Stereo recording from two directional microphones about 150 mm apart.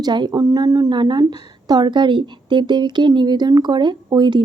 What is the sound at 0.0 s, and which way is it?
Speech, 30° right (ahead or behind).